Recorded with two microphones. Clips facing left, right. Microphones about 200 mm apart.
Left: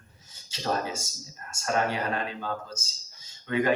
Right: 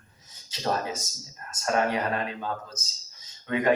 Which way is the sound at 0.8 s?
25° left (ahead or behind).